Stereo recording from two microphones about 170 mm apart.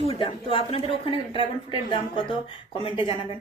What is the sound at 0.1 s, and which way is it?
A woman's voice, 30° left (ahead or behind).